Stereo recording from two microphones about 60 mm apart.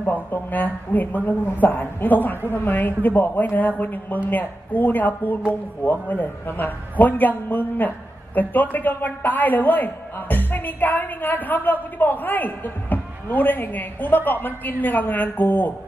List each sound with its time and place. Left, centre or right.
0.0 s a woman's voice: left